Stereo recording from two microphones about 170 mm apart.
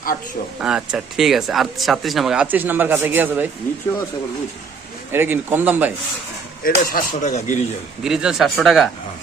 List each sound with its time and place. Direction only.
0.6 s speech: 5° right (ahead or behind)
5.1 s speech: 10° right (ahead or behind)
6.7 s speech: 55° left (ahead or behind)
8.0 s speech: 5° right (ahead or behind)